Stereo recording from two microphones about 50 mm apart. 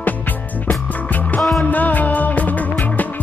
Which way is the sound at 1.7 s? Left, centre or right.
Left.